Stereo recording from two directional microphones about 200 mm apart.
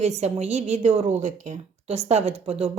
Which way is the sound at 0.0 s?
35° right (ahead or behind).